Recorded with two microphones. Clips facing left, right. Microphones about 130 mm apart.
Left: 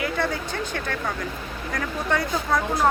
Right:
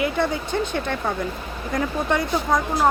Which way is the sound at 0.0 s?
20° right (ahead or behind).